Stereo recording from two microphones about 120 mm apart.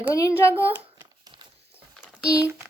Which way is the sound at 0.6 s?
15° right (ahead or behind).